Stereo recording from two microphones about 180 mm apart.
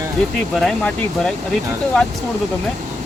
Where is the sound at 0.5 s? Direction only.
Centre (ahead or behind).